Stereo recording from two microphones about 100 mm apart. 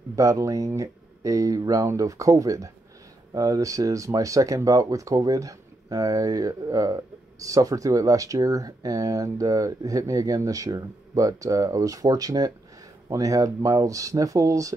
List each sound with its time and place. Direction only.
0.1 s speech: 35° right (ahead or behind)